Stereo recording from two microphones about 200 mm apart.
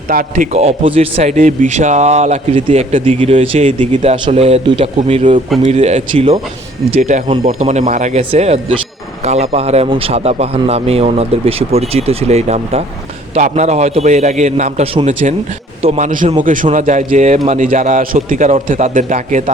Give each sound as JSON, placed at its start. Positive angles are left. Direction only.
{"t": 0.1, "sound": "a man's voice", "side_deg": -45}
{"t": 0.5, "sound": "speech", "side_deg": -30}